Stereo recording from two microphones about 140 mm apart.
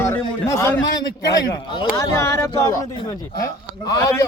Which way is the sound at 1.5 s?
35° left (ahead or behind).